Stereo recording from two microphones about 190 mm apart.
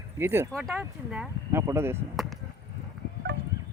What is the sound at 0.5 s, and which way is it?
Speech, centre (ahead or behind).